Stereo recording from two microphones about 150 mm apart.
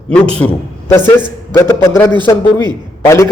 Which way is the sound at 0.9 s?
15° left (ahead or behind).